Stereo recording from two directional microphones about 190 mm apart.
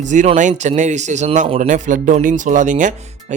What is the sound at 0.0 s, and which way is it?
A man's voice, 40° right (ahead or behind).